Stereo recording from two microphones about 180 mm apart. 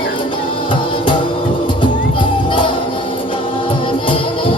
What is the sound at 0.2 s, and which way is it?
Music, 30° left (ahead or behind).